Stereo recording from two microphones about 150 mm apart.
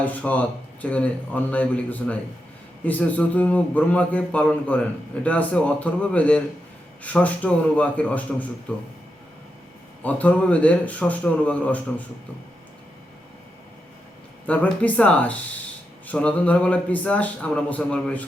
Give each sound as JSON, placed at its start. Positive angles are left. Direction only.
{"t": 0.0, "sound": "a man's voice", "side_deg": 10}
{"t": 10.0, "sound": "a man's voice", "side_deg": 10}
{"t": 14.4, "sound": "a man's voice", "side_deg": 10}